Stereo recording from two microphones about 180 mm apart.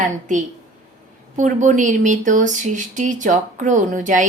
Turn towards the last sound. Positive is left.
turn(degrees=-45)  # may be behind; listen again after turning